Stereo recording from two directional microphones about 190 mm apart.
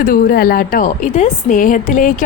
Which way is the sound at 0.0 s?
50° left (ahead or behind).